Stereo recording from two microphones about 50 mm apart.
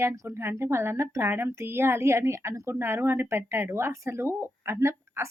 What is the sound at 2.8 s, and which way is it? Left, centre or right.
Speech, right.